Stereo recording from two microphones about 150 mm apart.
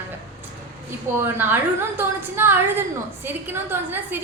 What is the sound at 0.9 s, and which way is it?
A woman's voice, 15° right (ahead or behind).